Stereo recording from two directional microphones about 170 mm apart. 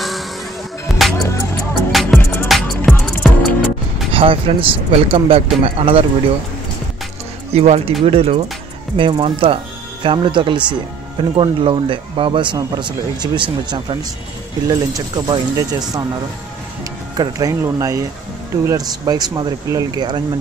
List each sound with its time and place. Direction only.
0.9 s music: centre (ahead or behind)
4.1 s speech: 30° right (ahead or behind)
7.5 s speech: 40° right (ahead or behind); by 15.8 s 20° right (ahead or behind)
17.2 s speech: 20° right (ahead or behind)